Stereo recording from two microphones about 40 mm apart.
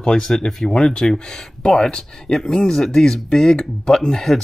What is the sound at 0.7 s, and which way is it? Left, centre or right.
Speech, left.